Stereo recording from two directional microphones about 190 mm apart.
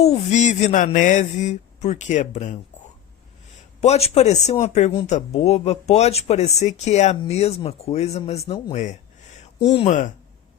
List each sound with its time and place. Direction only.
0.0 s speech: 35° left (ahead or behind)
8.7 s speech: 40° left (ahead or behind)
9.6 s speech: 30° left (ahead or behind)